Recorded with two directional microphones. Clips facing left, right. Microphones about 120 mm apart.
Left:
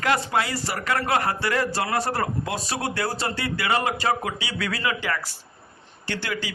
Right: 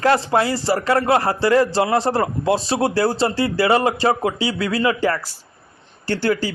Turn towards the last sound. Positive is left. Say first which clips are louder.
# right 10 dB
turn(degrees=-40)  # may be behind; listen again after turning